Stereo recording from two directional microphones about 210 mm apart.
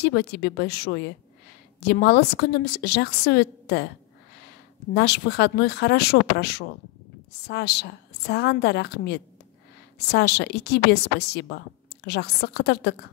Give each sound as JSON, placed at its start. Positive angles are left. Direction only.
{"t": 0.0, "sound": "a woman's voice", "side_deg": 50}
{"t": 4.9, "sound": "a woman's voice", "side_deg": 50}